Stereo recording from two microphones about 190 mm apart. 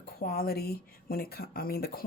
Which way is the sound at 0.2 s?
50° left (ahead or behind).